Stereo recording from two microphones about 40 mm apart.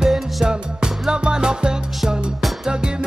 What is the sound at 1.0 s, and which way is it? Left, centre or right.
Music, right.